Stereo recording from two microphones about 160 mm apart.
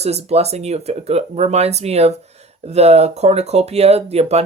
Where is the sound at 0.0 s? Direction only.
40° right (ahead or behind).